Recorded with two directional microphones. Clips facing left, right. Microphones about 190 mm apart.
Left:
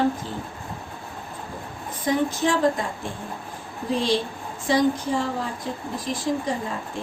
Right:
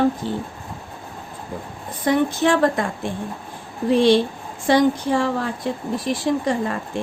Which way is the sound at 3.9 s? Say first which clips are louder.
Right 8 dB; 65° right (ahead or behind).